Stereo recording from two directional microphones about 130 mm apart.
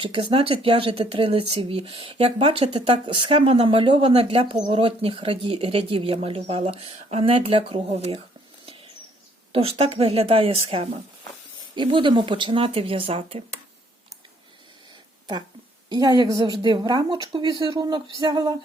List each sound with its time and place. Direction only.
0.0 s speech: 40° right (ahead or behind)
7.3 s speech: 45° right (ahead or behind)
9.5 s speech: 50° right (ahead or behind)
11.7 s speech: 40° right (ahead or behind)
15.9 s a woman's voice: 30° right (ahead or behind)